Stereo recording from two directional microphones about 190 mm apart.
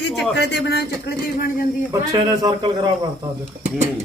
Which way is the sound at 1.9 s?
20° right (ahead or behind).